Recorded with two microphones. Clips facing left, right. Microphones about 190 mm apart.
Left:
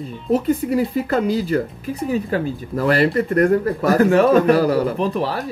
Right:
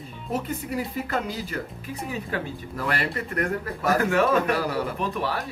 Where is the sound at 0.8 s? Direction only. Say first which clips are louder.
Left 9 dB; 35° left (ahead or behind).